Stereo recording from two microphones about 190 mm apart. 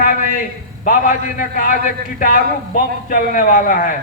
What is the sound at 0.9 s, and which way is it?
A man's voice, 45° left (ahead or behind).